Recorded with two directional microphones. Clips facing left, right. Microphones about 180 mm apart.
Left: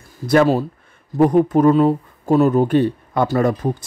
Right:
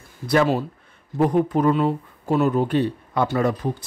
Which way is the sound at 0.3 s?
45° left (ahead or behind).